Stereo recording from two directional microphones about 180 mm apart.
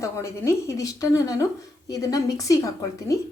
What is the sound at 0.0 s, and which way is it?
A woman's voice, 15° left (ahead or behind).